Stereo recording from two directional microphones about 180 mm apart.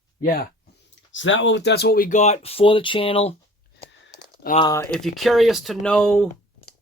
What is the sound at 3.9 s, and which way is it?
Typing, 90° left.